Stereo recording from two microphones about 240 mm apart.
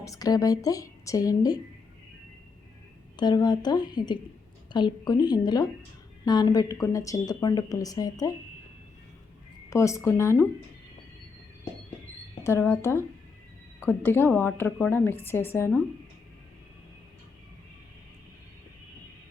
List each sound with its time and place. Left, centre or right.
0.0 s a woman's voice: centre
3.2 s a woman's voice: centre
9.6 s a woman's voice: centre
12.5 s a woman's voice: centre